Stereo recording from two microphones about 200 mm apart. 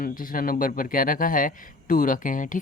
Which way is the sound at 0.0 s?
45° left (ahead or behind).